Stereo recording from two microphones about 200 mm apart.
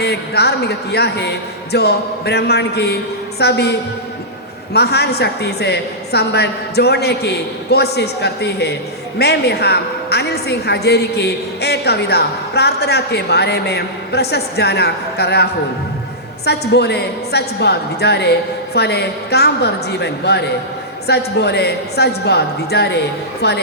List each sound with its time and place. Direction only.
0.0 s a woman's voice: 55° left (ahead or behind)
16.5 s a woman's voice: 55° left (ahead or behind)